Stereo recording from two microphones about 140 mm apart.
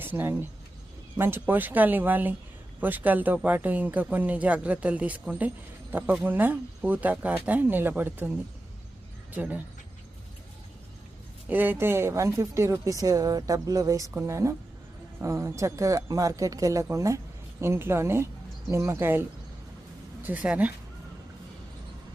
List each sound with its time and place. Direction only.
0.0 s speech: 15° right (ahead or behind)
9.3 s speech: 10° right (ahead or behind)
11.4 s speech: 15° right (ahead or behind)
20.2 s speech: 10° right (ahead or behind)